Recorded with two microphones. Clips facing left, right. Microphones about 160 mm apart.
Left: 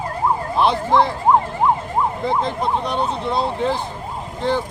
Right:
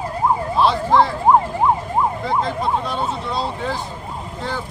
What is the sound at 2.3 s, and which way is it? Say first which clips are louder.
Speech: even; 20° left (ahead or behind).